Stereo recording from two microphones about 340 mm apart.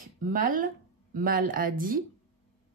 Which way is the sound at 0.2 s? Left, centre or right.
Right.